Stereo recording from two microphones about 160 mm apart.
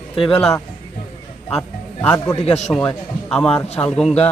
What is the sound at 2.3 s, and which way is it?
Speech, 40° left (ahead or behind).